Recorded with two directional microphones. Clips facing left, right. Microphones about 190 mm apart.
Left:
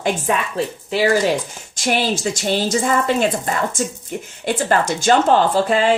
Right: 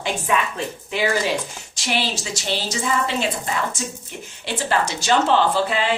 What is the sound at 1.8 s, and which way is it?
Speech, 50° left (ahead or behind).